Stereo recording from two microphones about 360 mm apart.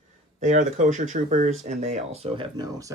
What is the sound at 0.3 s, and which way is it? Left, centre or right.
Speech, right.